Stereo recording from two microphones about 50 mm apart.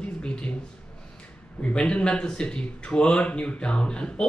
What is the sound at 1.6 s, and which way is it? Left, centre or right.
Speech, left.